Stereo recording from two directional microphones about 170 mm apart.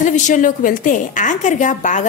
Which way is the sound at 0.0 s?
50° left (ahead or behind).